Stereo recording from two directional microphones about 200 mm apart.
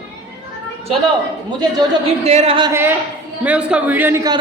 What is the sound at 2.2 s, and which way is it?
Speech, 30° right (ahead or behind).